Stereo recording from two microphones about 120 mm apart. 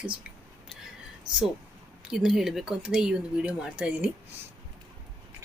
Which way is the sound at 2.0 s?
5° right (ahead or behind).